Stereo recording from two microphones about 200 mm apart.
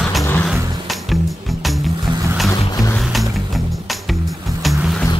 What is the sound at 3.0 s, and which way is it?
Music, centre (ahead or behind).